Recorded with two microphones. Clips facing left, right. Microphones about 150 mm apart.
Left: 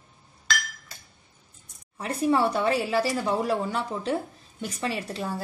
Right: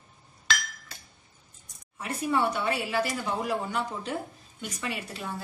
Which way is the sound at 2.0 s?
35° left (ahead or behind).